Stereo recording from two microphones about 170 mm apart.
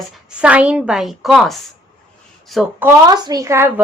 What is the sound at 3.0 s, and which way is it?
Speech, 25° right (ahead or behind).